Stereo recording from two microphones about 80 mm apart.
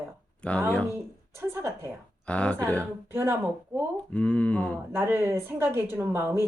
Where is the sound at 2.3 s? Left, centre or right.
Centre.